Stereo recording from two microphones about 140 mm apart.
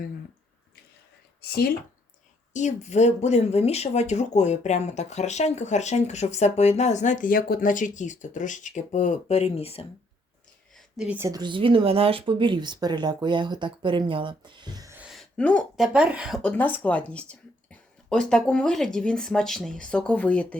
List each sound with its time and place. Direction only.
1.4 s speech: 90° left
2.5 s speech: 60° left (ahead or behind)
10.8 s a sound: 5° right (ahead or behind)
11.2 s speech: 25° right (ahead or behind)
14.9 s a sound: 5° right (ahead or behind)
15.4 s speech: 10° left (ahead or behind)
15.7 s a woman's voice: 5° right (ahead or behind)
16.4 s speech: 10° left (ahead or behind)